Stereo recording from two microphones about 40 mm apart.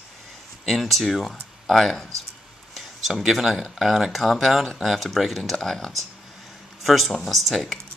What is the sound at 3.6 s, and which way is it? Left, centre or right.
Speech, centre.